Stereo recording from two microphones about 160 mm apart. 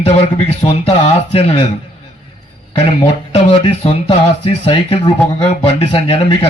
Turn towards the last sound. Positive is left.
turn(degrees=40)  # may be behind; listen again after turning